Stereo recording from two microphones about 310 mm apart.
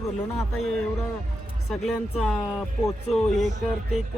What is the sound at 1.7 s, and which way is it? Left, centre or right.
Speech, centre.